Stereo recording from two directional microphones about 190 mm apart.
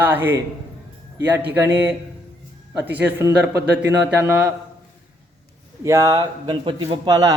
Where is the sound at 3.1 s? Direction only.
15° right (ahead or behind).